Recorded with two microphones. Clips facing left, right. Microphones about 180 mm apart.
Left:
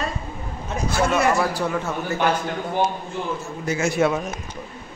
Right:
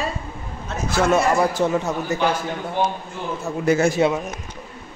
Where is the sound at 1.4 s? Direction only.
25° right (ahead or behind).